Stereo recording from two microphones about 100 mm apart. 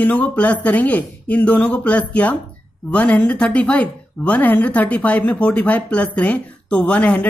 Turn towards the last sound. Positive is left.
turn(degrees=10)  # may be behind; listen again after turning